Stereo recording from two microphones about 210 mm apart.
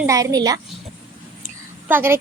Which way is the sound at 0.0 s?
15° right (ahead or behind).